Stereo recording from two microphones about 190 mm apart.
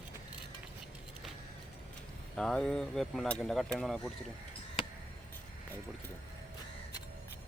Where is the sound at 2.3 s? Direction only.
5° left (ahead or behind).